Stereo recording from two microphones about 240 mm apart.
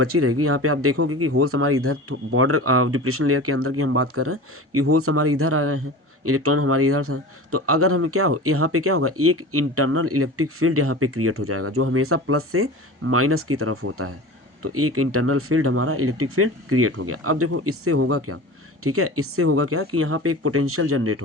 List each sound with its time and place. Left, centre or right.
0.0 s a man's voice: right